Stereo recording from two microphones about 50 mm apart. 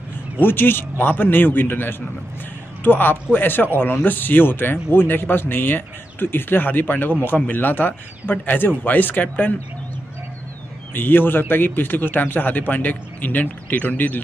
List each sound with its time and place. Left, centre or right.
0.4 s a man's voice: left
11.0 s a man's voice: left